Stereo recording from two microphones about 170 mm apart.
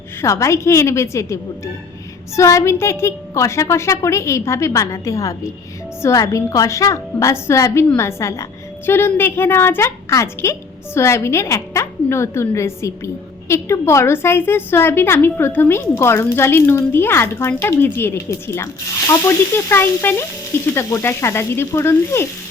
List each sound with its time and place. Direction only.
0.2 s a woman's voice: 15° left (ahead or behind)